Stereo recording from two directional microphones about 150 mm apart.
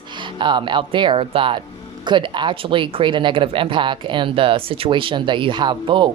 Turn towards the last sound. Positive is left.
turn(degrees=-30)  # may be behind; listen again after turning